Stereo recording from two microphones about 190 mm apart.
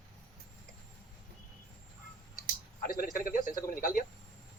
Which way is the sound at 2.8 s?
50° left (ahead or behind).